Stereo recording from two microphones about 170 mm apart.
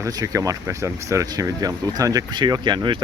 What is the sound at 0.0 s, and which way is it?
Speech, 20° right (ahead or behind).